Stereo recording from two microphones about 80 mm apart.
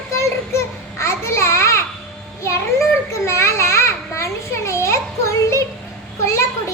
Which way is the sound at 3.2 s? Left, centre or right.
Left.